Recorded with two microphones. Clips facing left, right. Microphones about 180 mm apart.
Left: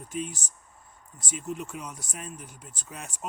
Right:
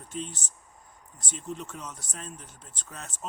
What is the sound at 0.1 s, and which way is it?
Speech, 10° left (ahead or behind).